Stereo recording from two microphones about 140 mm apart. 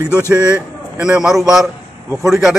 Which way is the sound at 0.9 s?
5° right (ahead or behind).